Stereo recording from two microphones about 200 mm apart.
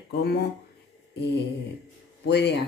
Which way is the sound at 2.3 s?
55° left (ahead or behind).